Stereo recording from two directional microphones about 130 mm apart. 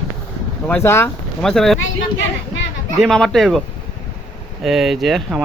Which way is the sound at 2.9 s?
Centre (ahead or behind).